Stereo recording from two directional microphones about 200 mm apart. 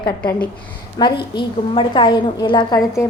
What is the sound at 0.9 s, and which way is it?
A woman's voice, 20° left (ahead or behind).